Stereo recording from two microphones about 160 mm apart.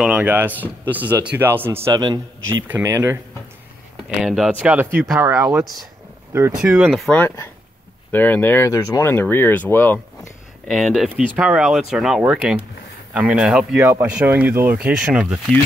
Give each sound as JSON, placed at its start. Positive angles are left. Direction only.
{"t": 0.0, "sound": "speech", "side_deg": -10}
{"t": 2.0, "sound": "a man's voice", "side_deg": -25}
{"t": 2.7, "sound": "speech", "side_deg": -15}
{"t": 3.9, "sound": "speech", "side_deg": 0}
{"t": 6.3, "sound": "speech", "side_deg": -15}
{"t": 6.8, "sound": "speech", "side_deg": 0}
{"t": 7.2, "sound": "speech", "side_deg": 15}
{"t": 10.7, "sound": "speech", "side_deg": 0}
{"t": 13.7, "sound": "speech", "side_deg": -15}